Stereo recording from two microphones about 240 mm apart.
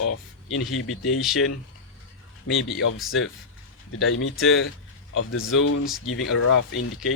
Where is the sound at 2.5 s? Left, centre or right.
Left.